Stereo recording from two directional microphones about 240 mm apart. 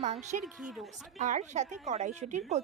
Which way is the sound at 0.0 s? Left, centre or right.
Right.